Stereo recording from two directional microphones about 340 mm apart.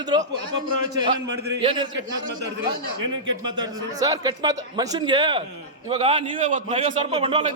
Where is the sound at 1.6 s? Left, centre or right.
Centre.